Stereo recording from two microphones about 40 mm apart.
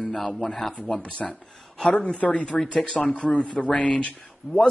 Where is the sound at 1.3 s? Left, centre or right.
Left.